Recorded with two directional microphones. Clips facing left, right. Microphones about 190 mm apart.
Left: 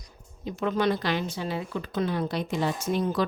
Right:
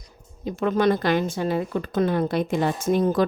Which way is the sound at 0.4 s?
50° right (ahead or behind).